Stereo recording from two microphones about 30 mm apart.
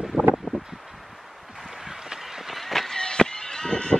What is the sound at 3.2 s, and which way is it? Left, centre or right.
Fowl, left.